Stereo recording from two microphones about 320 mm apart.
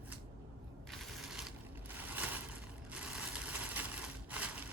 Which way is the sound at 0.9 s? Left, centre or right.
Centre.